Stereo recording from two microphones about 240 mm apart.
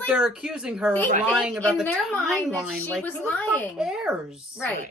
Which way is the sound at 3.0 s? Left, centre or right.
Centre.